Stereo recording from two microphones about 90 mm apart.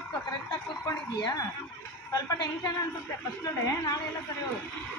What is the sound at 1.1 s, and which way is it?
A woman's voice, 45° left (ahead or behind).